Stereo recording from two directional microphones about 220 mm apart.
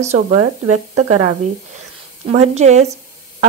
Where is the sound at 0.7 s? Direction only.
30° right (ahead or behind).